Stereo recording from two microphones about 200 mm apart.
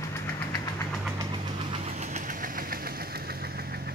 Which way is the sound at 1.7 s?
35° right (ahead or behind).